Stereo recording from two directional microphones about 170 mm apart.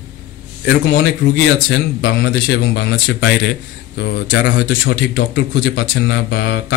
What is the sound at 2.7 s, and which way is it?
Speech, 90° left.